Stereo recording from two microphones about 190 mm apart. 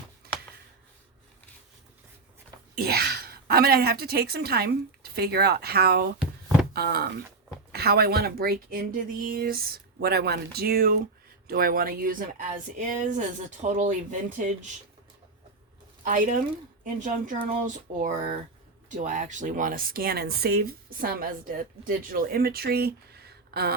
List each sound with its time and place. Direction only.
2.7 s a woman's voice: 55° right (ahead or behind)
16.0 s speech: 45° right (ahead or behind)